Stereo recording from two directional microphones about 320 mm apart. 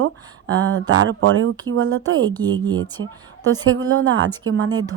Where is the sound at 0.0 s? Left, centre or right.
Right.